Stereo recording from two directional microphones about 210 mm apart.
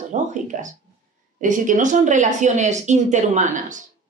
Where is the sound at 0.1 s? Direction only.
35° right (ahead or behind).